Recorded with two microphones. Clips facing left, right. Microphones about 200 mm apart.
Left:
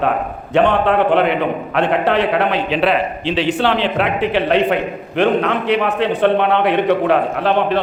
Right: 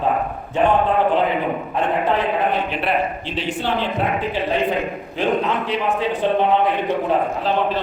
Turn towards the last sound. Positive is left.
turn(degrees=65)  # may be behind; listen again after turning